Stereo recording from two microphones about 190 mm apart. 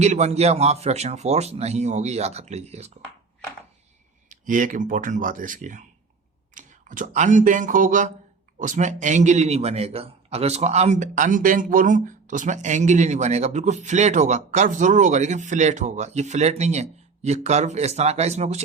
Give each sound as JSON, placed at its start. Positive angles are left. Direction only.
{"t": 0.0, "sound": "a man's voice", "side_deg": -35}
{"t": 4.3, "sound": "a man's voice", "side_deg": -45}